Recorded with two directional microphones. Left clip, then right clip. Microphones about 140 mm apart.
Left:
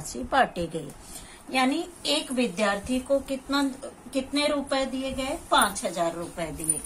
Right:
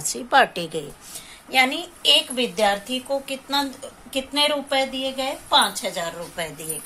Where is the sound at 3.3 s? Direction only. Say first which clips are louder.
Right 4 dB; 10° right (ahead or behind).